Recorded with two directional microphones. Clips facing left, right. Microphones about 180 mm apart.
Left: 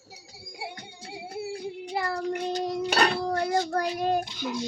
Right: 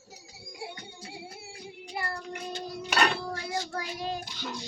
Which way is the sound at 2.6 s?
90° left.